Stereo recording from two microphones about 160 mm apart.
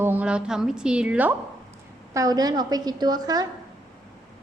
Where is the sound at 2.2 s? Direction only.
25° right (ahead or behind).